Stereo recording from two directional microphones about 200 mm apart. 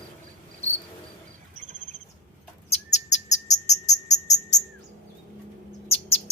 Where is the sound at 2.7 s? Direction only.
35° left (ahead or behind).